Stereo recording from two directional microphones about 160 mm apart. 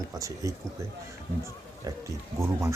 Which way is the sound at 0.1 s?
20° right (ahead or behind).